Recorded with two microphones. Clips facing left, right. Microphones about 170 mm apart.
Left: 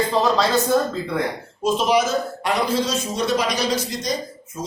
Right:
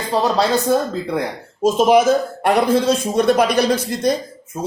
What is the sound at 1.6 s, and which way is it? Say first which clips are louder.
Speech: right 6 dB; 45° right (ahead or behind).